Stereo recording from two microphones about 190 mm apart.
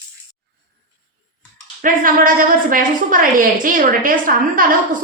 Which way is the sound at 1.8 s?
45° right (ahead or behind).